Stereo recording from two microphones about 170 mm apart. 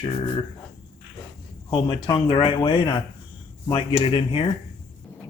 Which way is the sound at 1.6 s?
25° left (ahead or behind).